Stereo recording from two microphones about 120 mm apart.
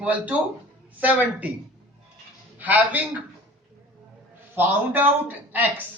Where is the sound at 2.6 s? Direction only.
15° right (ahead or behind).